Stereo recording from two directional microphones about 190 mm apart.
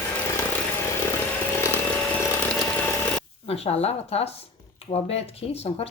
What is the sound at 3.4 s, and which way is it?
Speech, 30° left (ahead or behind).